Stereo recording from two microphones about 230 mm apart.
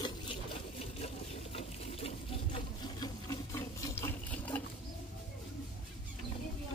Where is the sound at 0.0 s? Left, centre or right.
Left.